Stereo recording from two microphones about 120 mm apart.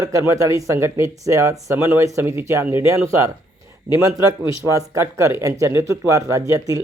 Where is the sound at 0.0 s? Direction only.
25° right (ahead or behind).